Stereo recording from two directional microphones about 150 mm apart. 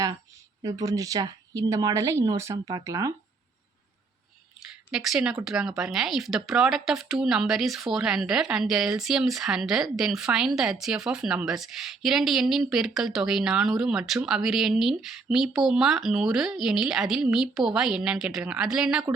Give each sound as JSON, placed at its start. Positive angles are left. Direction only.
{"t": 0.6, "sound": "speech", "side_deg": -20}
{"t": 4.9, "sound": "speech", "side_deg": -5}